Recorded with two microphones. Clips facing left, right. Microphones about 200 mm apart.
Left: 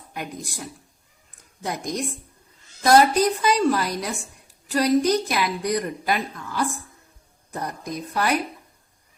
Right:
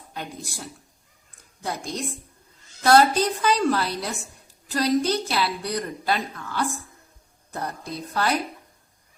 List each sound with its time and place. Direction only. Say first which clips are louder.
0.1 s speech: left 2 dB; 10° left (ahead or behind)
1.6 s a woman's voice: left 2 dB; 15° left (ahead or behind)